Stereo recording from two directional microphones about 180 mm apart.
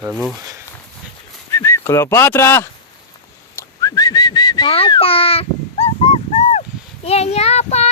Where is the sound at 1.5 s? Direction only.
15° left (ahead or behind).